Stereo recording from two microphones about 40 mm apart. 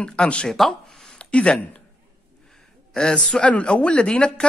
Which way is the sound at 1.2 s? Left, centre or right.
Left.